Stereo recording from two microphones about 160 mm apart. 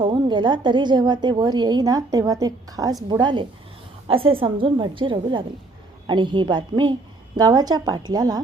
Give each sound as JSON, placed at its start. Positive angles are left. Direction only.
{"t": 0.0, "sound": "a woman's voice", "side_deg": -30}